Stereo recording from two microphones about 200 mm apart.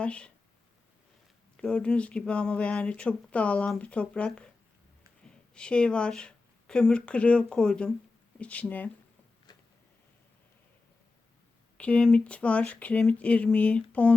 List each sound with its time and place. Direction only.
0.0 s speech: 5° left (ahead or behind)
1.5 s speech: 5° left (ahead or behind)
5.5 s speech: 5° left (ahead or behind)
9.5 s a sound: 20° left (ahead or behind)
11.8 s speech: 5° left (ahead or behind)